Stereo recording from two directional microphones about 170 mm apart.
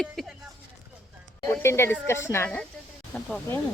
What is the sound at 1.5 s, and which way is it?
Speech, 15° left (ahead or behind).